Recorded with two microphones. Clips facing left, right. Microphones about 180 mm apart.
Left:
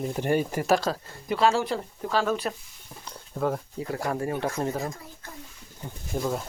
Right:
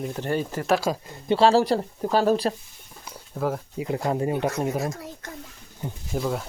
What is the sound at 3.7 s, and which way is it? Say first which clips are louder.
Speech: right 4 dB; 20° right (ahead or behind).